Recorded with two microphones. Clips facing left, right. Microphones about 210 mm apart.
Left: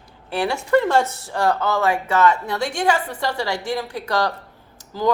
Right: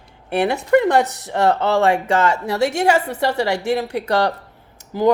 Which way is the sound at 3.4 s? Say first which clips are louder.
Right 5 dB; 65° right (ahead or behind).